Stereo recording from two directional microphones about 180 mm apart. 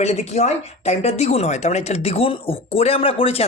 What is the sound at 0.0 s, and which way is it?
Speech, 40° left (ahead or behind).